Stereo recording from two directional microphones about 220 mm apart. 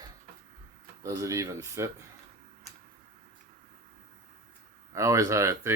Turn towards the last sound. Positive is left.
turn(degrees=-15)  # may be behind; listen again after turning